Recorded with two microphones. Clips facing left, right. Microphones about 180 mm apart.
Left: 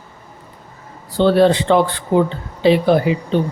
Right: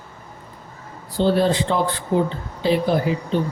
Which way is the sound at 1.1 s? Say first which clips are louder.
Left 5 dB; 70° left (ahead or behind).